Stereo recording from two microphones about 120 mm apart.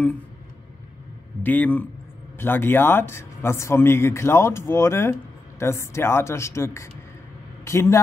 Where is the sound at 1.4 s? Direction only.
15° left (ahead or behind).